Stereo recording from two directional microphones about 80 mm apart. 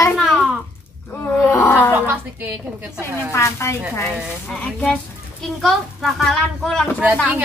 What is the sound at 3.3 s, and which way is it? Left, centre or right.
Speech, left.